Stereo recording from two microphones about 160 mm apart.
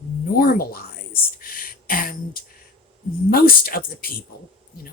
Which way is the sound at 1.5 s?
65° left (ahead or behind).